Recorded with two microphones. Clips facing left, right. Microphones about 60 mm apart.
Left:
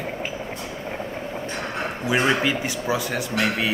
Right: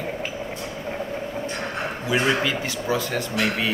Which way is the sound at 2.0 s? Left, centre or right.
Left.